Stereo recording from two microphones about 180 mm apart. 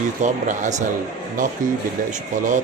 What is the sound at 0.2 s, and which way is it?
A man's voice, 40° right (ahead or behind).